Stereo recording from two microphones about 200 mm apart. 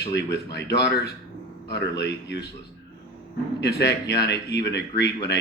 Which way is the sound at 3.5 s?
55° left (ahead or behind).